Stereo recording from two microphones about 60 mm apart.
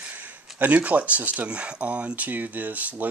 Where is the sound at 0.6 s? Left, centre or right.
Right.